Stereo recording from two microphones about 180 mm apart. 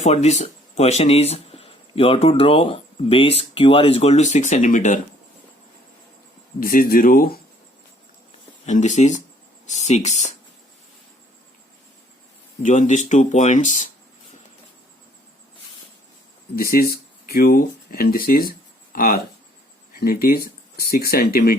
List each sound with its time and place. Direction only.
0.0 s speech: 40° left (ahead or behind)
6.6 s speech: 50° left (ahead or behind)
8.6 s speech: 40° left (ahead or behind)
12.6 s speech: 45° left (ahead or behind)
16.6 s speech: 55° left (ahead or behind)